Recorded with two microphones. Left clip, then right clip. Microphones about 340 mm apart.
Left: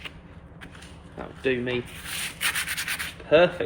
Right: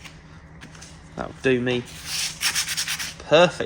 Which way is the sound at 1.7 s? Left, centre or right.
Right.